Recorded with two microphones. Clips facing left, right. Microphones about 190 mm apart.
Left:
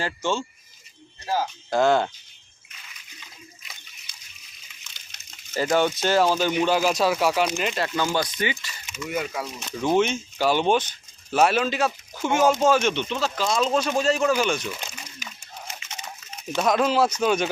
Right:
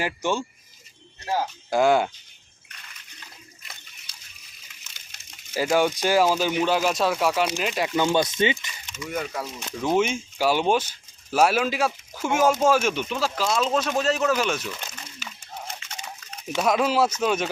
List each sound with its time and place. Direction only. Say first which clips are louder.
0.0 s speech: right 1 dB; 15° right (ahead or behind)
1.7 s speech: even; 10° right (ahead or behind)
4.8 s a sound: even; 10° right (ahead or behind)
6.6 s speech: left 1 dB; centre (ahead or behind)
7.8 s speech: right 5 dB; 20° right (ahead or behind)
9.0 s speech: left 1 dB; 5° left (ahead or behind)
16.5 s speech: left 1 dB; 5° right (ahead or behind)